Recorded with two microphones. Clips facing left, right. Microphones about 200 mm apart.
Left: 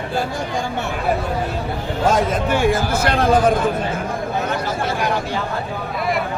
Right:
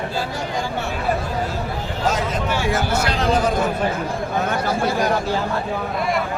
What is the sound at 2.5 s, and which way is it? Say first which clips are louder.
Speech: left 3 dB; 55° left (ahead or behind).